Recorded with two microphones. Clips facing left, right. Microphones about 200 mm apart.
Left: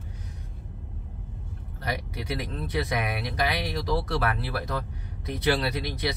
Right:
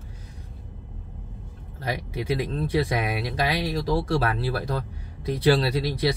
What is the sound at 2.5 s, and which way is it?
Speech, 30° right (ahead or behind).